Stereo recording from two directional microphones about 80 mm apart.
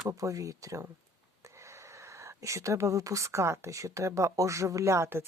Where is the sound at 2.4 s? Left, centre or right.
Right.